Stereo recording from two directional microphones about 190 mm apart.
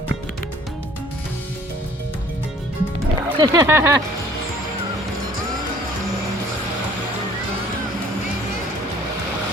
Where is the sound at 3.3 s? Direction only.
20° right (ahead or behind).